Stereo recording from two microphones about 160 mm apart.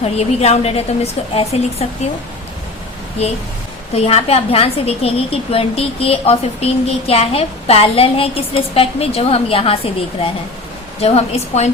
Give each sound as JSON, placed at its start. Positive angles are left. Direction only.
{"t": 0.0, "sound": "a woman's voice", "side_deg": 40}
{"t": 3.9, "sound": "a woman's voice", "side_deg": 40}
{"t": 11.0, "sound": "a woman's voice", "side_deg": 40}